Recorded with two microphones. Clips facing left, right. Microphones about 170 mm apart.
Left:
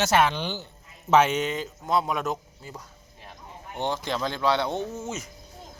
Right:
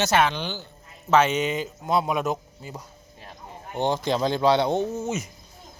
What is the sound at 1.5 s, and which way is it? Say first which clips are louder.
Speech: right 2 dB; 10° right (ahead or behind).